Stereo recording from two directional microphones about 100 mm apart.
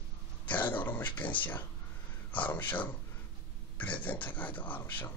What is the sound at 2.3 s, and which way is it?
Speech, 20° left (ahead or behind).